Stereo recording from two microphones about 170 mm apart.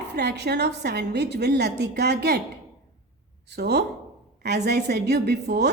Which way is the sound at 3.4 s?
75° right (ahead or behind).